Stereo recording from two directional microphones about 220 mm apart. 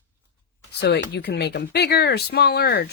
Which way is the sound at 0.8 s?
50° left (ahead or behind).